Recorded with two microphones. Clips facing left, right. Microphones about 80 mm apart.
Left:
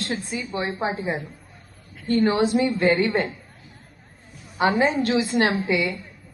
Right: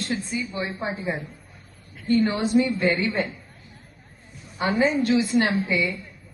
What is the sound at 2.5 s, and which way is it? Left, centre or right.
Speech, left.